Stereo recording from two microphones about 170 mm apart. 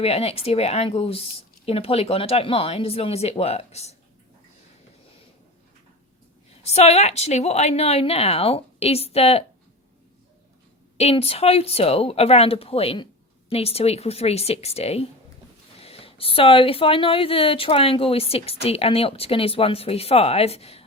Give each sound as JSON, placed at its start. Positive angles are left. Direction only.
{"t": 0.0, "sound": "speech", "side_deg": 35}
{"t": 6.6, "sound": "speech", "side_deg": 40}
{"t": 10.9, "sound": "speech", "side_deg": 35}